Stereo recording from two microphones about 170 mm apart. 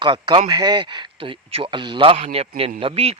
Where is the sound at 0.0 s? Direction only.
30° right (ahead or behind).